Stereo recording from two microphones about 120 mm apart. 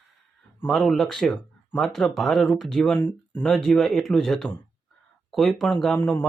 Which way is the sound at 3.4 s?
5° left (ahead or behind).